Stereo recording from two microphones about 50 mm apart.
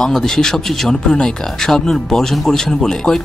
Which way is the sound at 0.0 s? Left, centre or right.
Centre.